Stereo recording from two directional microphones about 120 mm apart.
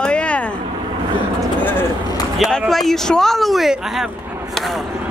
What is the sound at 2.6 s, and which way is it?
Speech, centre (ahead or behind).